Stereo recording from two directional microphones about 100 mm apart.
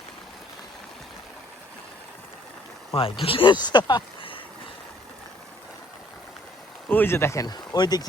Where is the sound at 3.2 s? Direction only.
65° left (ahead or behind).